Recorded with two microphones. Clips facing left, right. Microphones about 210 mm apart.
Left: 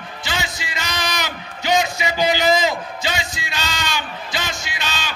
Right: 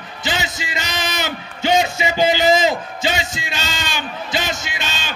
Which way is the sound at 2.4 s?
20° right (ahead or behind).